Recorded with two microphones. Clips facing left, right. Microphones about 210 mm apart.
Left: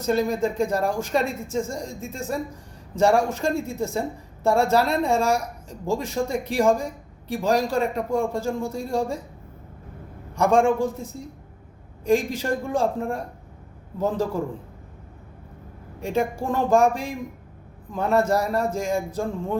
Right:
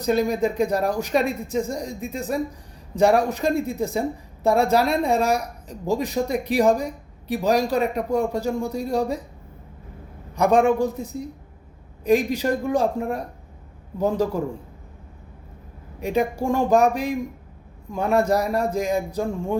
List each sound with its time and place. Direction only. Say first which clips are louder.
0.0 s speech: right 2 dB; 15° right (ahead or behind)
10.3 s a man's voice: right 1 dB; 15° right (ahead or behind)
12.0 s speech: right 2 dB; 15° right (ahead or behind)
16.0 s a woman's voice: right 2 dB; 15° right (ahead or behind)